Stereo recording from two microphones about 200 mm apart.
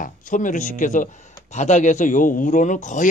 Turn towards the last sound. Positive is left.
turn(degrees=40)  # may be behind; listen again after turning